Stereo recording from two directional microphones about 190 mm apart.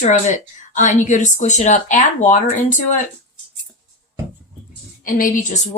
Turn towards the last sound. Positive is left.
turn(degrees=45)  # may be behind; listen again after turning